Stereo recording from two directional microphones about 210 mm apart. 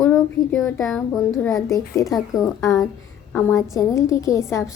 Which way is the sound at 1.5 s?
15° left (ahead or behind).